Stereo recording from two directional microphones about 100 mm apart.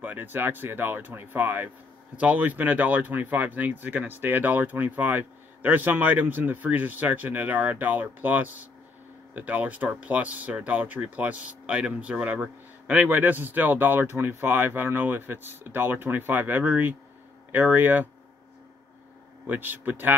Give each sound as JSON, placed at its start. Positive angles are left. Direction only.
{"t": 0.0, "sound": "speech", "side_deg": -15}
{"t": 19.4, "sound": "speech", "side_deg": -20}